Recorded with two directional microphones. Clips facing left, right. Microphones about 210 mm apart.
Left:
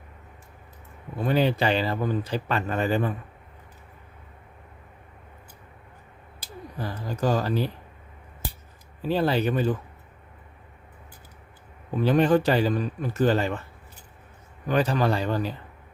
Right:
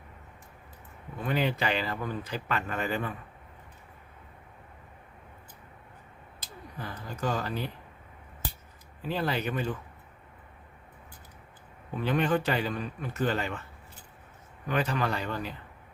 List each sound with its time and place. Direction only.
1.2 s speech: 35° left (ahead or behind)
6.7 s speech: 35° left (ahead or behind)
9.0 s speech: 30° left (ahead or behind)
12.0 s speech: 35° left (ahead or behind)
14.7 s speech: 35° left (ahead or behind)